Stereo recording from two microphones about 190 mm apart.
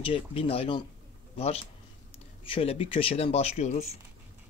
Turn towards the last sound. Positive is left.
turn(degrees=35)  # may be behind; listen again after turning